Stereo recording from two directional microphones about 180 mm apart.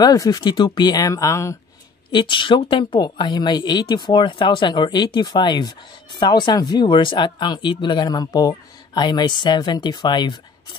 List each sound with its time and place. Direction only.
0.0 s speech: 20° left (ahead or behind)